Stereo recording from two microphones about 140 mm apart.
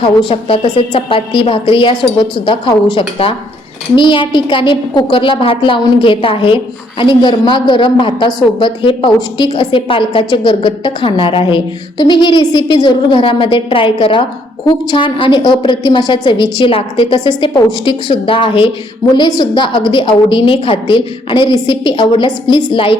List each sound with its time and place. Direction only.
0.0 s a woman's voice: 40° left (ahead or behind)
3.9 s a woman's voice: 35° left (ahead or behind)